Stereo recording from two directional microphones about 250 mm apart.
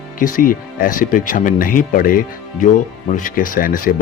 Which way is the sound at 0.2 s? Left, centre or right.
Left.